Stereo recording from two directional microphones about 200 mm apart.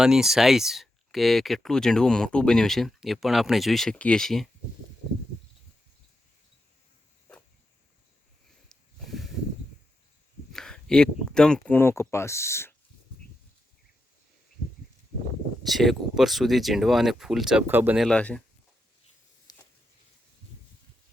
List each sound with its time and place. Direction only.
0.0 s speech: 5° right (ahead or behind)
8.7 s snake: centre (ahead or behind)
10.5 s speech: 5° left (ahead or behind)
15.6 s speech: centre (ahead or behind)
19.5 s a sound: 20° left (ahead or behind)